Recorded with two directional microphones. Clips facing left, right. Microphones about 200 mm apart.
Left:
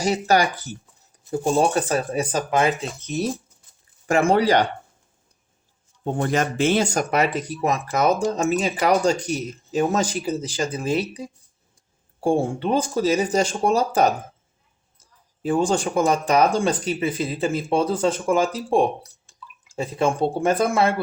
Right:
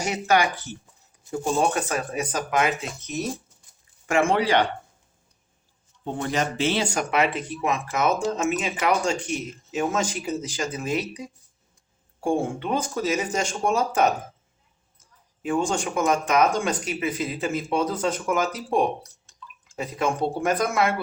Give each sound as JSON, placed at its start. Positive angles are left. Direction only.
{"t": 0.0, "sound": "speech", "side_deg": 35}
{"t": 6.1, "sound": "speech", "side_deg": 45}